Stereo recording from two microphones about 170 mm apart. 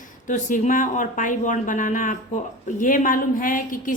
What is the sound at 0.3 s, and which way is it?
A woman's voice, 50° left (ahead or behind).